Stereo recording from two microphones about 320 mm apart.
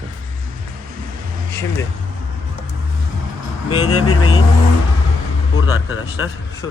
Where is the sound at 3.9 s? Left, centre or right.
Left.